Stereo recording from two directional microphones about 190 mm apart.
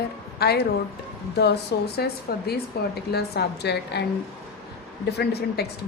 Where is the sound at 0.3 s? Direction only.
60° left (ahead or behind).